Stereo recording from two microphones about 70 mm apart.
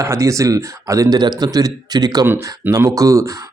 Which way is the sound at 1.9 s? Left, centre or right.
Right.